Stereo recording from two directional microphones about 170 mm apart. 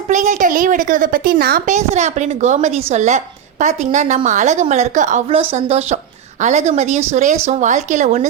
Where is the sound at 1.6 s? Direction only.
40° right (ahead or behind).